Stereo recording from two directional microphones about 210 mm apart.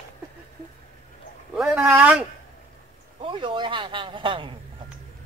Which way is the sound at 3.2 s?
25° right (ahead or behind).